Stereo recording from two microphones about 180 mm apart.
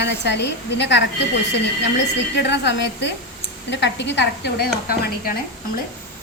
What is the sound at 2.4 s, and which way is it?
A woman's voice, 75° left (ahead or behind).